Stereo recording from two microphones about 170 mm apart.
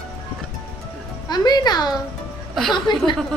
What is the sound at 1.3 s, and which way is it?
A child's voice, 25° left (ahead or behind).